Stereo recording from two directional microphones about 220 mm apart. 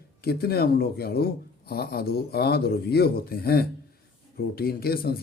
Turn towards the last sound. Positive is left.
turn(degrees=45)  # may be behind; listen again after turning